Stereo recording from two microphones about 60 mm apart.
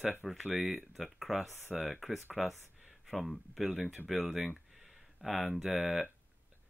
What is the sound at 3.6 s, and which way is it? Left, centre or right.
Speech, centre.